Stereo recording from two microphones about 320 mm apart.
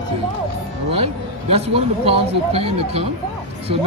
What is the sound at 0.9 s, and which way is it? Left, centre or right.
Speech, centre.